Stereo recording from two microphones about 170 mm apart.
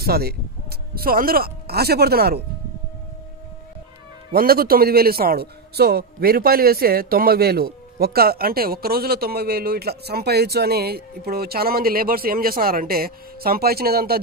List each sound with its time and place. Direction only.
0.0 s speech: 65° right (ahead or behind)
4.3 s speech: 60° right (ahead or behind)